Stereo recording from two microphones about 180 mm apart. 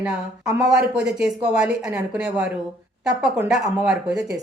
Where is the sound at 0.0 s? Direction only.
5° right (ahead or behind).